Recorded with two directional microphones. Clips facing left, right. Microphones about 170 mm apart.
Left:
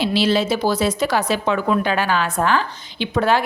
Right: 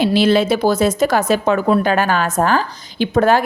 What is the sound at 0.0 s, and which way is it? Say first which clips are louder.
A woman's voice: right 4 dB; 50° right (ahead or behind).